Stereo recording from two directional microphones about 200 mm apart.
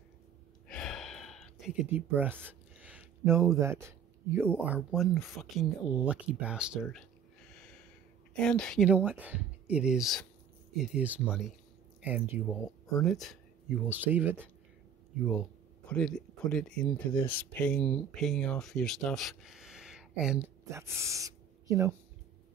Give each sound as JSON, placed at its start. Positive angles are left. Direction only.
{"t": 0.7, "sound": "gasp", "side_deg": 5}
{"t": 4.3, "sound": "speech", "side_deg": -10}
{"t": 8.4, "sound": "speech", "side_deg": 5}
{"t": 15.9, "sound": "speech", "side_deg": 5}